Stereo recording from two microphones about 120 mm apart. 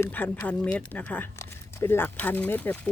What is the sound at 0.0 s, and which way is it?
Speech, 15° left (ahead or behind).